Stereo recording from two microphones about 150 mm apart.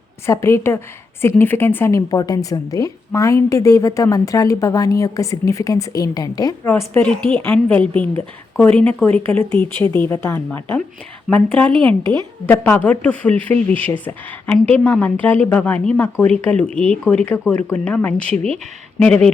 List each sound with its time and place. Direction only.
0.3 s a woman's voice: 20° left (ahead or behind)
6.7 s speech: 10° left (ahead or behind)
11.7 s speech: 35° right (ahead or behind)
12.5 s speech: 10° left (ahead or behind)